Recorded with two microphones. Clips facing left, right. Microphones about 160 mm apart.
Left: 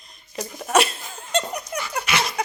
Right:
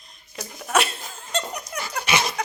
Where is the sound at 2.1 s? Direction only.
15° right (ahead or behind).